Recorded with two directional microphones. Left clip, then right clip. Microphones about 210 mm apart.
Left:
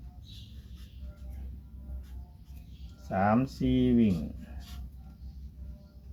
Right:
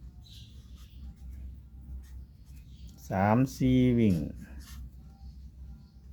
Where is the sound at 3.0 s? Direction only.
55° right (ahead or behind).